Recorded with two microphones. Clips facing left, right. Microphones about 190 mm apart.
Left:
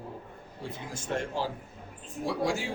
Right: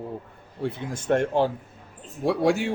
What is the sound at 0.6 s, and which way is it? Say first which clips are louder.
A man's voice: right 10 dB; 60° right (ahead or behind).